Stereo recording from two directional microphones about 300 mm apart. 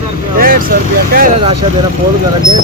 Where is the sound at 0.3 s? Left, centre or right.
Right.